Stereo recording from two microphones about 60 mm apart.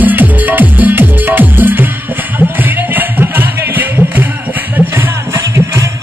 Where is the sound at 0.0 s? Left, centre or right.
Right.